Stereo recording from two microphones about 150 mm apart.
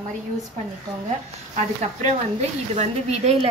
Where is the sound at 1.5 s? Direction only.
50° right (ahead or behind).